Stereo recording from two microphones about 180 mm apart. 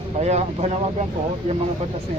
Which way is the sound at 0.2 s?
40° right (ahead or behind).